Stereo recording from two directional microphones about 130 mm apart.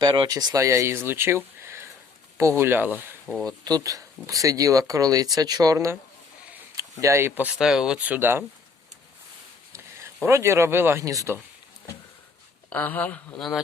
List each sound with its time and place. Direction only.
0.0 s speech: 35° right (ahead or behind); by 3.2 s 15° right (ahead or behind)
3.4 s speech: 30° right (ahead or behind)
10.2 s speech: 20° right (ahead or behind)
12.7 s speech: 15° left (ahead or behind)